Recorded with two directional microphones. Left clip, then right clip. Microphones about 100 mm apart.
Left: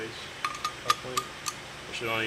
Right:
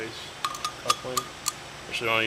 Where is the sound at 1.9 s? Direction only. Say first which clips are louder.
Right 6 dB; 30° right (ahead or behind).